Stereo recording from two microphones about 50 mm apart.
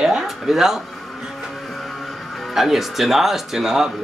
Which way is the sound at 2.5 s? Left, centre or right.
Centre.